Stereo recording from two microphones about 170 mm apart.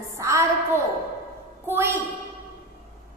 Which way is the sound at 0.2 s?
15° right (ahead or behind).